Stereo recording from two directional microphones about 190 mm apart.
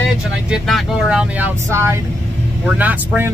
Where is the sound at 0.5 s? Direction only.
5° right (ahead or behind).